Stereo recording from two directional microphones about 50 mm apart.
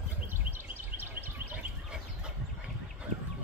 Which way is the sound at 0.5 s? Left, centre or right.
Right.